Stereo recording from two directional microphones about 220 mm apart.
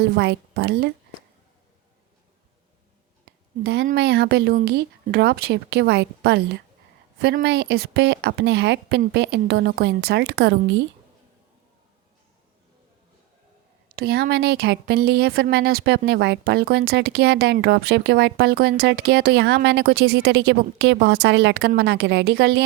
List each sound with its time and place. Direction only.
0.0 s a woman's voice: 50° right (ahead or behind)
3.6 s a woman's voice: 50° right (ahead or behind)
13.8 s a woman's voice: 45° right (ahead or behind)